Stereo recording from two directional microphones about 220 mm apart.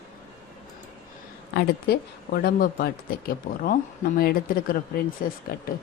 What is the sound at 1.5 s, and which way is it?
Speech, 45° left (ahead or behind).